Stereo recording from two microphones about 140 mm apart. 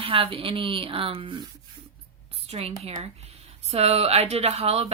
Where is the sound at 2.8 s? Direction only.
45° right (ahead or behind).